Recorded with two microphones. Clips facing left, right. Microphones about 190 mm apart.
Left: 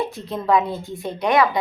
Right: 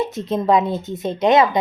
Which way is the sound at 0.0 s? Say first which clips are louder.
Right 5 dB; 20° right (ahead or behind).